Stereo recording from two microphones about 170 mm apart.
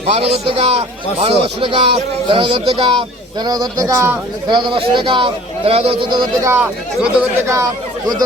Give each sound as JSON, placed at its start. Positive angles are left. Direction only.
{"t": 0.0, "sound": "a man's voice", "side_deg": -40}
{"t": 6.5, "sound": "speech", "side_deg": -10}
{"t": 7.5, "sound": "speech", "side_deg": -20}